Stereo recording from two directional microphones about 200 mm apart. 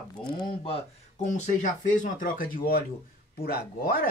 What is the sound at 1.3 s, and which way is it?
Speech, 40° left (ahead or behind).